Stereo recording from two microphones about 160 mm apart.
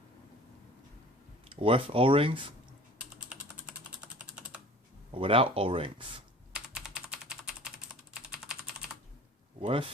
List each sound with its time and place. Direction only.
1.5 s speech: 35° right (ahead or behind)
3.2 s typing: 5° right (ahead or behind)
5.1 s speech: 35° right (ahead or behind)
6.5 s typing: 5° right (ahead or behind)
9.6 s speech: 35° right (ahead or behind)